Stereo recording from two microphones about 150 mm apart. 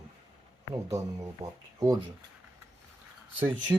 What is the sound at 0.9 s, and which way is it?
Speech, 20° right (ahead or behind).